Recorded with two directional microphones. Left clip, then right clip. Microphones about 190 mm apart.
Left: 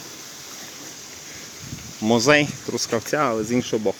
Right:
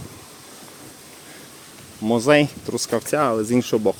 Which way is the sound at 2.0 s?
Centre (ahead or behind).